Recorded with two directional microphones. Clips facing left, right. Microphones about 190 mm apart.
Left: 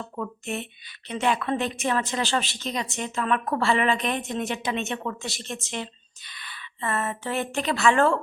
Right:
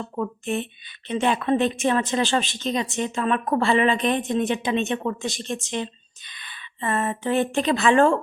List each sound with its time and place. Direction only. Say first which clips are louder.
1.0 s a woman's voice: right 3 dB; 25° right (ahead or behind)